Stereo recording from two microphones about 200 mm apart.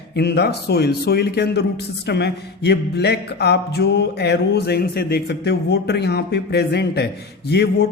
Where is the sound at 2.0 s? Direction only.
55° left (ahead or behind).